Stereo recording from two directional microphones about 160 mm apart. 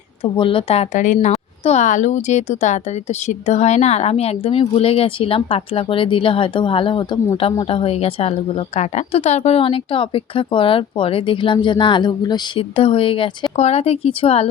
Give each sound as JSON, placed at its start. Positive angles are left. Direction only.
{"t": 0.2, "sound": "a woman's voice", "side_deg": 35}